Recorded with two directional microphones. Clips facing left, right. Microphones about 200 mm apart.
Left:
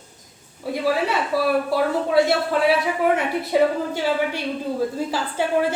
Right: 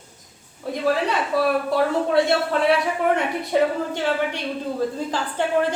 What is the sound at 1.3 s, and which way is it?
A woman's voice, 5° left (ahead or behind).